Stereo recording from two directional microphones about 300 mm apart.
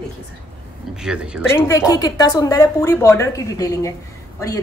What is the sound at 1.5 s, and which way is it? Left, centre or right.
A woman's voice, centre.